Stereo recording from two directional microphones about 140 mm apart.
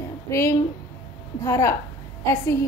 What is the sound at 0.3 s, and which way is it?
A woman's voice, 20° left (ahead or behind).